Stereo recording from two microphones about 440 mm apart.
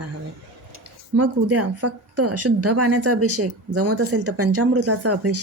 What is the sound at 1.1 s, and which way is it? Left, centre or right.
Speech, right.